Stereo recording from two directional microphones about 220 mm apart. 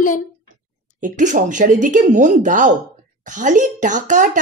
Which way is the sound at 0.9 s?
35° right (ahead or behind).